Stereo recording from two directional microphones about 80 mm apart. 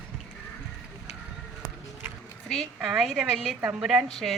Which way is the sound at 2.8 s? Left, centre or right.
Centre.